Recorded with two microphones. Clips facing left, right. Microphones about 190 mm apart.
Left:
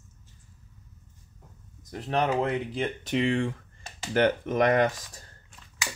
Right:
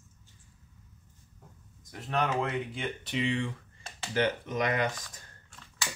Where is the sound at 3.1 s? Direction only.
50° left (ahead or behind).